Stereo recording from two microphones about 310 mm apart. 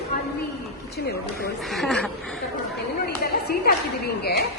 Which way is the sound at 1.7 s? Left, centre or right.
Centre.